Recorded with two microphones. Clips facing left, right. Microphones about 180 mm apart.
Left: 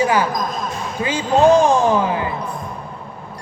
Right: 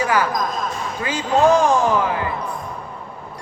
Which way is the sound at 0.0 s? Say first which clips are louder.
Left 2 dB; 25° left (ahead or behind).